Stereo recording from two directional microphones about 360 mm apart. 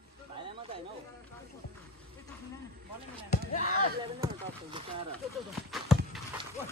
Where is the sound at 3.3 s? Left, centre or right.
Left.